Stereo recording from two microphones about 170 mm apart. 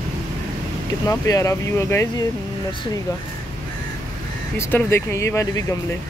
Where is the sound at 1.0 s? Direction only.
20° left (ahead or behind).